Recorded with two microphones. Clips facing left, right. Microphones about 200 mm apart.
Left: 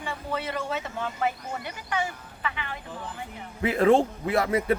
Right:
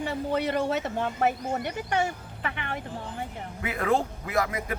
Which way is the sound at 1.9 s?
55° right (ahead or behind).